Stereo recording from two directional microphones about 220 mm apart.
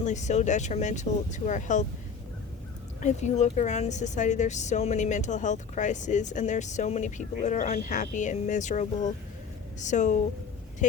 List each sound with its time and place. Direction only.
0.0 s a woman's voice: 35° left (ahead or behind)
3.0 s a woman's voice: 35° left (ahead or behind)